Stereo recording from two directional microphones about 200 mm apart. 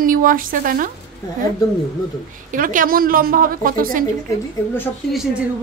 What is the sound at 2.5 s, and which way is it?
A woman's voice, 45° right (ahead or behind).